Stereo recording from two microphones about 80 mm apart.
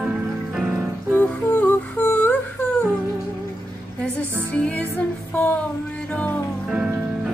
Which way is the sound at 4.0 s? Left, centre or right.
Centre.